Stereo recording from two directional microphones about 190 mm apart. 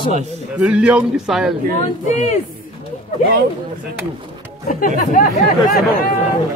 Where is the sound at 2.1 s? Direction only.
40° left (ahead or behind).